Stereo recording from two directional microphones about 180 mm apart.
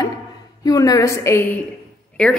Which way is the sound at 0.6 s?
20° left (ahead or behind).